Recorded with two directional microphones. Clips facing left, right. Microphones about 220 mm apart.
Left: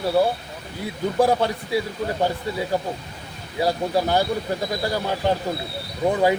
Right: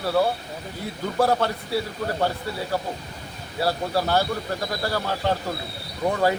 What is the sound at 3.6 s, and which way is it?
A man's voice, 15° left (ahead or behind).